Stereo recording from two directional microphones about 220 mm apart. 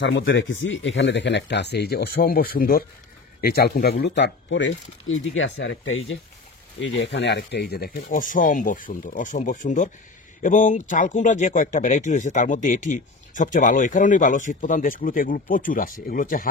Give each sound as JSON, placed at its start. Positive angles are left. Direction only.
{"t": 0.0, "sound": "speech", "side_deg": 55}